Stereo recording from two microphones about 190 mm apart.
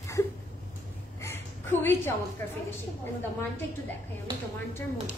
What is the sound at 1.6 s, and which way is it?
Speech, 10° left (ahead or behind).